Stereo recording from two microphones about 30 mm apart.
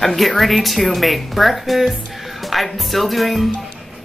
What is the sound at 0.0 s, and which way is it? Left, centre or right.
Speech, centre.